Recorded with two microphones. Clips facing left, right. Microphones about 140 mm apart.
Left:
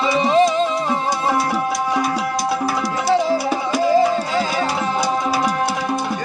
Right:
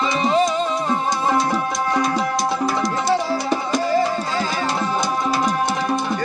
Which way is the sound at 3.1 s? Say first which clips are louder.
Left 5 dB; 15° left (ahead or behind).